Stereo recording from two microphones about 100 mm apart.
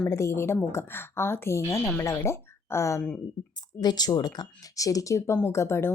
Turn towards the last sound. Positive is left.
turn(degrees=25)  # may be behind; listen again after turning